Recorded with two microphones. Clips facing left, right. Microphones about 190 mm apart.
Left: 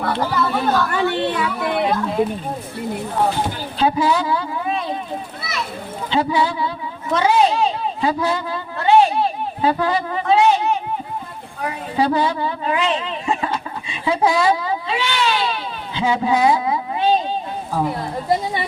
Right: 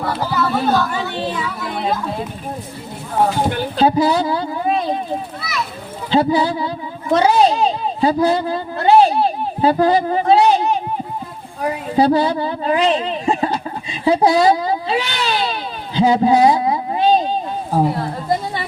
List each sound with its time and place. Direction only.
0.1 s speech: 5° right (ahead or behind)
0.9 s speech: 65° left (ahead or behind)
3.8 s a man's voice: 35° right (ahead or behind)
6.1 s a woman's voice: 35° right (ahead or behind)
16.0 s a sound: 35° right (ahead or behind)